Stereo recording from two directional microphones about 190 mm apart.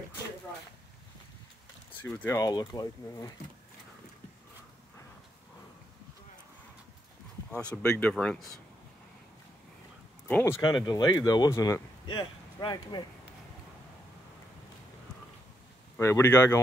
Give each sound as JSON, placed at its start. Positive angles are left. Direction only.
{"t": 2.0, "sound": "speech", "side_deg": 10}
{"t": 2.3, "sound": "speech", "side_deg": 20}
{"t": 7.5, "sound": "speech", "side_deg": 5}
{"t": 10.2, "sound": "speech", "side_deg": 15}
{"t": 16.0, "sound": "speech", "side_deg": 15}